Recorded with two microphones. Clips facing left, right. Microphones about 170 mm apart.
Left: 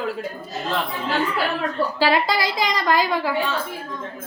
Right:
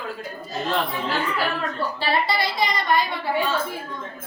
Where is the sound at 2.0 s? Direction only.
90° left.